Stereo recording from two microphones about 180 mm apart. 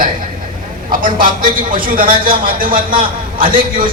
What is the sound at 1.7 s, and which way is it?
A man's voice, 50° right (ahead or behind).